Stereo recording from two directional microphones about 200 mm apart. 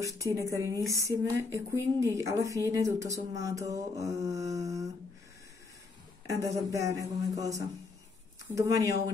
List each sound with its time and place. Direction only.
0.0 s speech: 15° right (ahead or behind)
6.2 s speech: 15° right (ahead or behind)